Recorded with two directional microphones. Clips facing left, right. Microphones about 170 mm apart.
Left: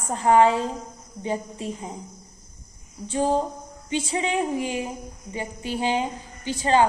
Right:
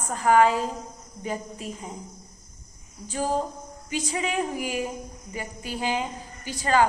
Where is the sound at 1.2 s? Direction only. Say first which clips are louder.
Left 4 dB; 30° left (ahead or behind).